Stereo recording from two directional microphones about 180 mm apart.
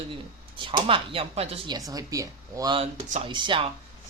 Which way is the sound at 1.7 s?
20° right (ahead or behind).